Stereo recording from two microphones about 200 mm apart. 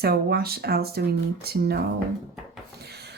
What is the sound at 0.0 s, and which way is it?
Speech, 50° right (ahead or behind).